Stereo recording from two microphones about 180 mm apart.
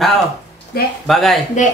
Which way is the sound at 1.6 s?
45° left (ahead or behind).